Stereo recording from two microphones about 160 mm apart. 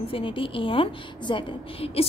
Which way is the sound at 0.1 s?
35° left (ahead or behind).